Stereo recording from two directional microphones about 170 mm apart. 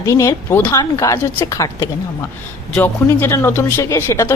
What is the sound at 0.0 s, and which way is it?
A man's voice, 15° left (ahead or behind).